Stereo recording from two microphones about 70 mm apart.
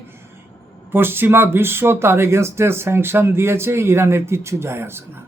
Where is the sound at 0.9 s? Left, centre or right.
Right.